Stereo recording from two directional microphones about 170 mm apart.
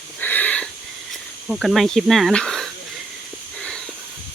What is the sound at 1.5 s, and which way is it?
Speech, centre (ahead or behind).